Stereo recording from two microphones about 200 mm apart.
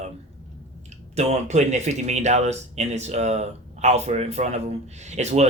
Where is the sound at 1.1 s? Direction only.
30° right (ahead or behind).